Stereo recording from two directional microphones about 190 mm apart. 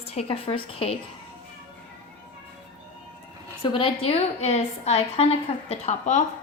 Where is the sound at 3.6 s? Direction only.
30° left (ahead or behind).